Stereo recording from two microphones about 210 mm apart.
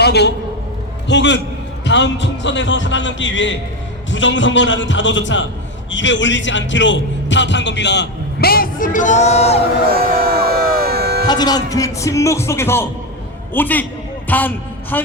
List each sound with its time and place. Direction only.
0.0 s a man's voice: 50° left (ahead or behind); by 9.6 s 30° left (ahead or behind)
10.0 s a sound: 45° right (ahead or behind)
11.3 s a woman's voice: 20° left (ahead or behind)